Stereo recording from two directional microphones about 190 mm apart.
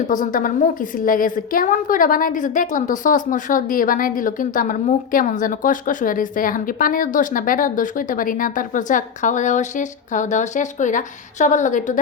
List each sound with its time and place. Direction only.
0.1 s a woman's voice: 45° left (ahead or behind)